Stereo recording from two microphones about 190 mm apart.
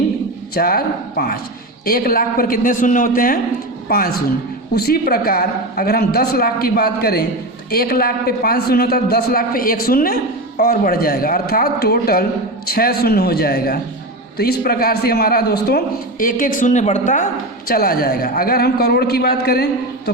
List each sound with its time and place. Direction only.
0.5 s a man's voice: 50° left (ahead or behind)
17.7 s a woman's voice: 50° left (ahead or behind)